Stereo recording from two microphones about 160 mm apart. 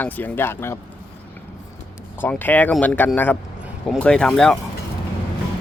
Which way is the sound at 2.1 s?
10° left (ahead or behind).